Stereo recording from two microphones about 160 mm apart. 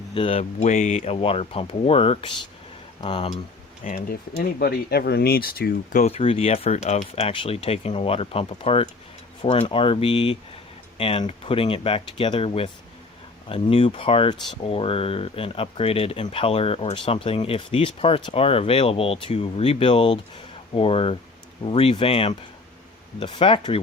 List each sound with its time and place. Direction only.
0.1 s speech: 35° left (ahead or behind)
3.8 s speech: 60° left (ahead or behind)
4.6 s speech: 75° left (ahead or behind); by 23.8 s 35° left (ahead or behind)